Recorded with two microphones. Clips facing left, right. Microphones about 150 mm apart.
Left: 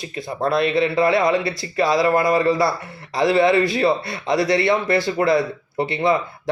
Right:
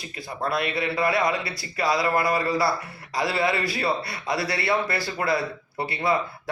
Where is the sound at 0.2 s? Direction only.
25° left (ahead or behind).